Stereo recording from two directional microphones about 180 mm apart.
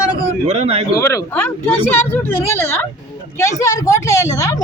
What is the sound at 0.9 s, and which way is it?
Speech, 15° left (ahead or behind).